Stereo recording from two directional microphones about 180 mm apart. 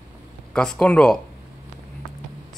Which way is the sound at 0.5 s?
5° left (ahead or behind).